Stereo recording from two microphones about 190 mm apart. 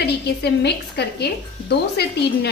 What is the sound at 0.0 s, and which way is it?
A woman's voice, 60° left (ahead or behind).